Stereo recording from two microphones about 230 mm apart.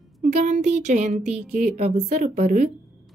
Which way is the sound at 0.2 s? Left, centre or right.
Right.